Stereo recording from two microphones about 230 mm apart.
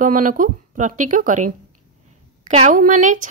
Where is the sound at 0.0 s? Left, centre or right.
Right.